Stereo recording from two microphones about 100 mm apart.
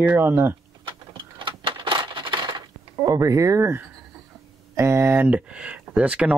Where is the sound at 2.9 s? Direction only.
35° right (ahead or behind).